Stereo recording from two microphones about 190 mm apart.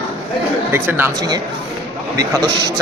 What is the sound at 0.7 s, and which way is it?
A man's voice, 10° right (ahead or behind).